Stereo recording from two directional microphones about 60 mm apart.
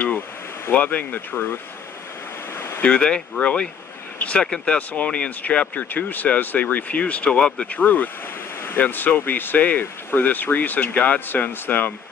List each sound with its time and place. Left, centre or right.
0.7 s speech: left
2.8 s speech: centre
7.6 s speech: left